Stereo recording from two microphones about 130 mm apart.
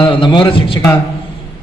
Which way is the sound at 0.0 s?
40° left (ahead or behind).